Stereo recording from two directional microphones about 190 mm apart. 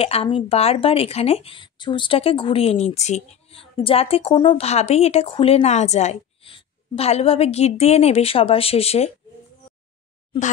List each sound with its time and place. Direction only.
0.0 s speech: 30° left (ahead or behind)